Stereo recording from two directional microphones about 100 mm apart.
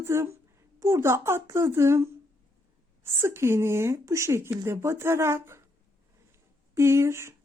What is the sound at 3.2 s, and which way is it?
A woman's voice, 25° right (ahead or behind).